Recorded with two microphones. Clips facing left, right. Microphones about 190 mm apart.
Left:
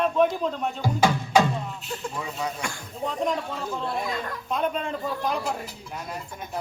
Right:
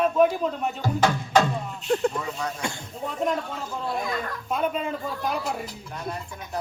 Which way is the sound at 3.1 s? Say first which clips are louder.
Right 2 dB; 5° right (ahead or behind).